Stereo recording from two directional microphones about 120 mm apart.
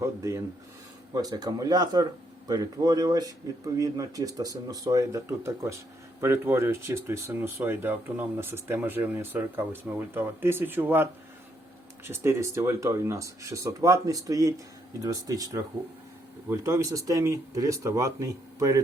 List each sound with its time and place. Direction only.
0.0 s speech: 25° right (ahead or behind)